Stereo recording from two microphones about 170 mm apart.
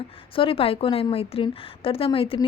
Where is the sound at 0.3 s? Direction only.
35° left (ahead or behind).